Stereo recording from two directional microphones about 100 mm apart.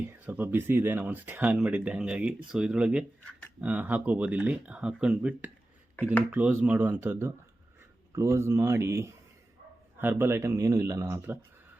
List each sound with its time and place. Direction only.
0.3 s speech: 20° right (ahead or behind)